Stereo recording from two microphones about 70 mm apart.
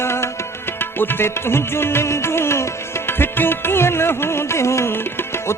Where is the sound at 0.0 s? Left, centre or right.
Left.